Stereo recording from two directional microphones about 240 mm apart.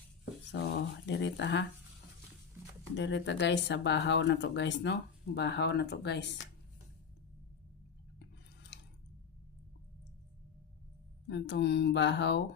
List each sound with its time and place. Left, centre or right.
0.5 s speech: left
2.9 s speech: left
11.3 s speech: left